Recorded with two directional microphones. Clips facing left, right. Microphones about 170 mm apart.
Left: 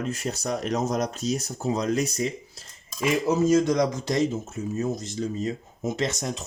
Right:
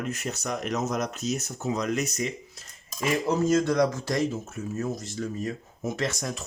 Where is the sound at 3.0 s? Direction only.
10° left (ahead or behind).